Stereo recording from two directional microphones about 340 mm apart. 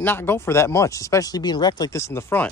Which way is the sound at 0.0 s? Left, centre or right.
Centre.